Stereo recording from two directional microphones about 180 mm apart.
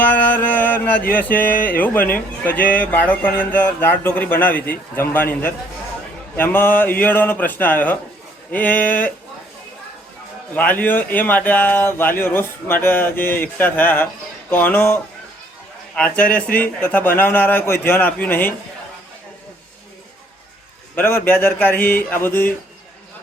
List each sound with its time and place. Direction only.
0.3 s mantra: 10° left (ahead or behind)
1.1 s speech: 10° left (ahead or behind)
10.5 s speech: 10° left (ahead or behind)
20.9 s a man's voice: 10° left (ahead or behind)